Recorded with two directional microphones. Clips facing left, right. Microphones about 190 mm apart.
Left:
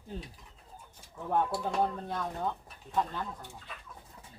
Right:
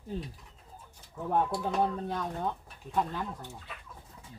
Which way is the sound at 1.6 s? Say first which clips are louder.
Right 1 dB; 5° right (ahead or behind).